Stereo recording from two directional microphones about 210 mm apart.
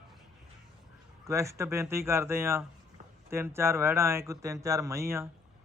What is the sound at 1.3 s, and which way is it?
Speech, 15° right (ahead or behind).